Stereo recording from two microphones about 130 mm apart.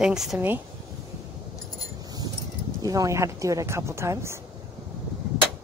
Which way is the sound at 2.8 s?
25° right (ahead or behind).